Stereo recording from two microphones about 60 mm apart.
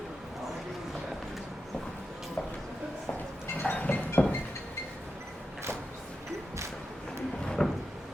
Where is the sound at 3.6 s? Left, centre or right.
Left.